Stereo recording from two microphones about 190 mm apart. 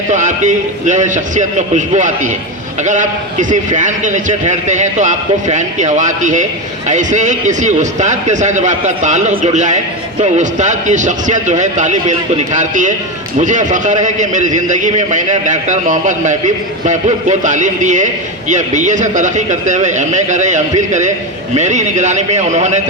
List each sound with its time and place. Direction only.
0.1 s a man's voice: 40° right (ahead or behind)